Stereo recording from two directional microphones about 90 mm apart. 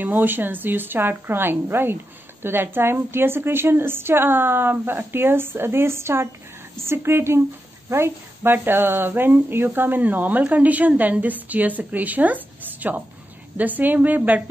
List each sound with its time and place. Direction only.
0.0 s speech: 20° right (ahead or behind)